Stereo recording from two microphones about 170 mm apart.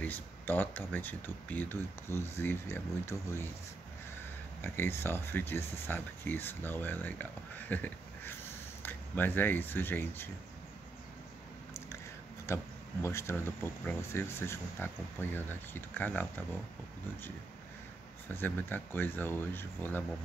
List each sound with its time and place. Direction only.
0.0 s speech: 10° left (ahead or behind)
4.6 s speech: 15° left (ahead or behind)
13.0 s speech: 15° left (ahead or behind)
18.3 s speech: 10° left (ahead or behind)